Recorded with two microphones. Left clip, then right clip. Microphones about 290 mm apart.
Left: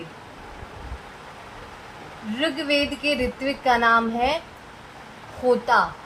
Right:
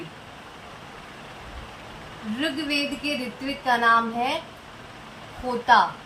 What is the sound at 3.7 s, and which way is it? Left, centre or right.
Speech, left.